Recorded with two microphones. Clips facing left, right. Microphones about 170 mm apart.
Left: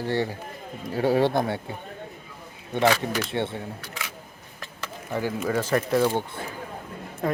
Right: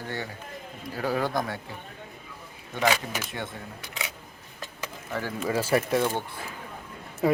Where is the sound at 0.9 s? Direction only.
30° left (ahead or behind).